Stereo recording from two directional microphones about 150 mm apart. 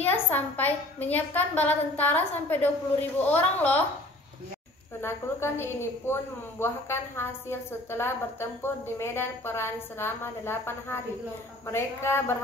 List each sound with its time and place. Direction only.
0.0 s a woman's voice: 10° left (ahead or behind)
5.0 s a woman's voice: 15° left (ahead or behind)